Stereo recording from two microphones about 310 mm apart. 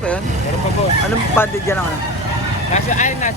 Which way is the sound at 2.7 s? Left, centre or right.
Left.